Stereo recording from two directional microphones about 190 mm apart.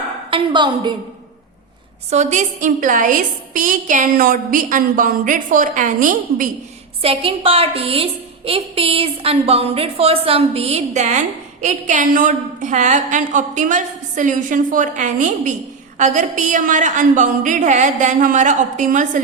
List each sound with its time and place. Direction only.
0.3 s a sound: 25° right (ahead or behind)
2.0 s a woman's voice: 40° right (ahead or behind)
7.0 s a woman's voice: 30° right (ahead or behind)